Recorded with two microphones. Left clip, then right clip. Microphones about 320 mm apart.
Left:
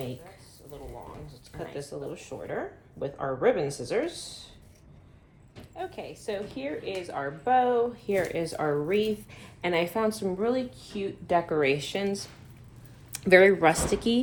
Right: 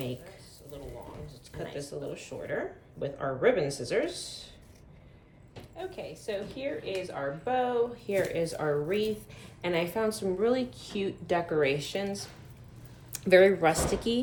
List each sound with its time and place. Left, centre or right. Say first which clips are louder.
1.3 s speech: even; centre
5.7 s a woman's voice: left 2 dB; left
10.4 s a woman's voice: right 1 dB; centre
11.3 s a woman's voice: left 3 dB; centre